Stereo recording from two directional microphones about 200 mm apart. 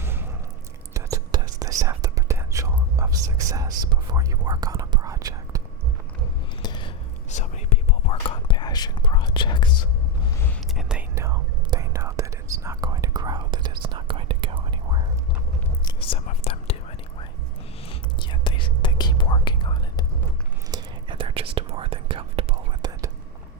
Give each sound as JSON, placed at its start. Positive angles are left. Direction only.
{"t": 0.0, "sound": "squish", "side_deg": -10}
{"t": 0.9, "sound": "whispering", "side_deg": -15}
{"t": 6.6, "sound": "a sound", "side_deg": 20}
{"t": 7.3, "sound": "whispering", "side_deg": 35}
{"t": 10.8, "sound": "whispering", "side_deg": -5}
{"t": 11.1, "sound": "whispering", "side_deg": -15}
{"t": 15.8, "sound": "whispering", "side_deg": 25}
{"t": 17.8, "sound": "whispering", "side_deg": 25}
{"t": 20.7, "sound": "whispering", "side_deg": -20}